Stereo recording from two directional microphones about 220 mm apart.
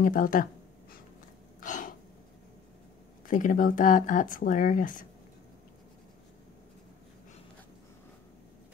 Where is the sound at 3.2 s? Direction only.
35° left (ahead or behind).